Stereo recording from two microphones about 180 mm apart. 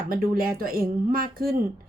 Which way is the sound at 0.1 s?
55° right (ahead or behind).